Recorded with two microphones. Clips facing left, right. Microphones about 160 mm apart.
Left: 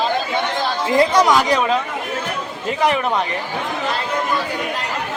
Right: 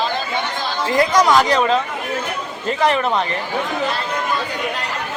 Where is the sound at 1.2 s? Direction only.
10° left (ahead or behind).